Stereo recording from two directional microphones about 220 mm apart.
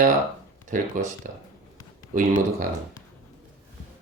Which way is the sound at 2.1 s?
35° right (ahead or behind).